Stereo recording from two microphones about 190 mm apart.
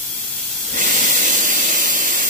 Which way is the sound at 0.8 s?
45° right (ahead or behind).